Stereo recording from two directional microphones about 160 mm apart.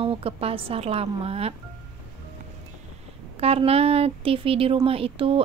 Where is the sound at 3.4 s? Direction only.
40° right (ahead or behind).